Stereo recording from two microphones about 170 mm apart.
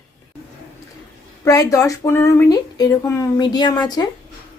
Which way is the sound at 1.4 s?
20° left (ahead or behind).